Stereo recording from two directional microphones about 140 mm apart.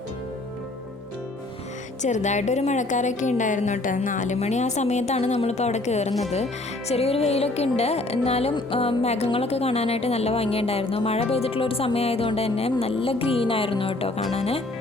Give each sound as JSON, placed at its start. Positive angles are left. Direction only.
{"t": 2.0, "sound": "a woman's voice", "side_deg": 60}